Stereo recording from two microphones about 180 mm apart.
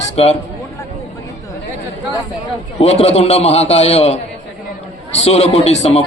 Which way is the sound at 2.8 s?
35° left (ahead or behind).